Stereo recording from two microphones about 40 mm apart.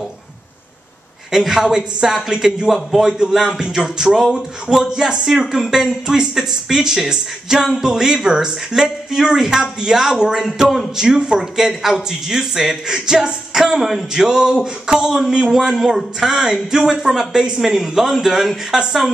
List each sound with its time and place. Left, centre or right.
1.3 s speech: centre
17.6 s speech: centre